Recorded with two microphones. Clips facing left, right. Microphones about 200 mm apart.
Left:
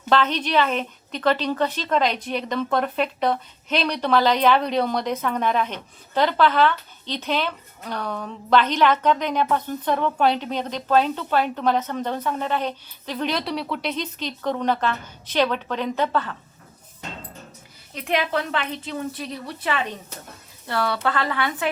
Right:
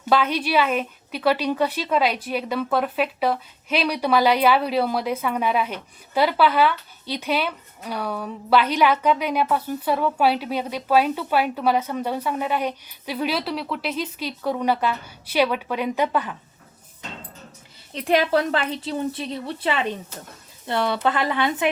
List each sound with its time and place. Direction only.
0.1 s a woman's voice: 10° right (ahead or behind)
17.9 s a woman's voice: 35° right (ahead or behind)